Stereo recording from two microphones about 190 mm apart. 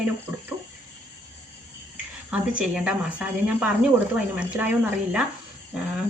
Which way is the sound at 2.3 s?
5° right (ahead or behind).